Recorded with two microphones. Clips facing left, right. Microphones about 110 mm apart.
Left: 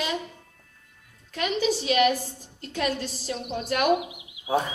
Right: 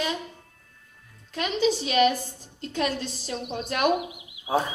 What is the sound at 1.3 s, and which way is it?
Music, 25° right (ahead or behind).